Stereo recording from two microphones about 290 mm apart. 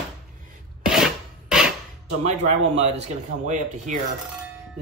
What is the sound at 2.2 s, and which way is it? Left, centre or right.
Speech, right.